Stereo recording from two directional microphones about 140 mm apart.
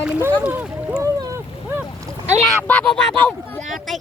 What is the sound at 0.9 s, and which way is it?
Speech, 25° right (ahead or behind).